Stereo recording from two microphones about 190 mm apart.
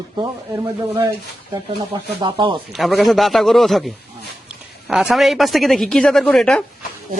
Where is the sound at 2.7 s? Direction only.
Centre (ahead or behind).